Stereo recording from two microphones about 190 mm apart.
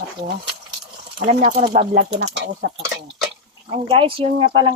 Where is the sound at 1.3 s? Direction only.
45° right (ahead or behind).